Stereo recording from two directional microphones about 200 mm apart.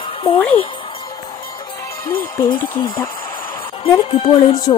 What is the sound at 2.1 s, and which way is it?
A woman's voice, 25° left (ahead or behind).